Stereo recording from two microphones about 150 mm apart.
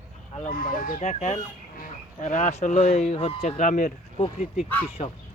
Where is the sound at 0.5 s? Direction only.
70° left (ahead or behind).